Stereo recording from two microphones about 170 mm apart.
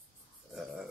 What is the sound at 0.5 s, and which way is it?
Speech, centre (ahead or behind).